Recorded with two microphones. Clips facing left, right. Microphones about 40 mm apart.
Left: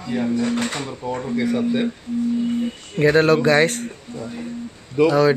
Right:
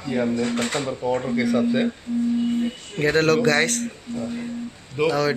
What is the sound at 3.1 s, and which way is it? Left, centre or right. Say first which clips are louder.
Speech: left 2 dB; left.